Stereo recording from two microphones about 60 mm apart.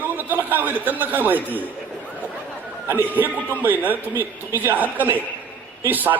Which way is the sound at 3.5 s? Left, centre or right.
Right.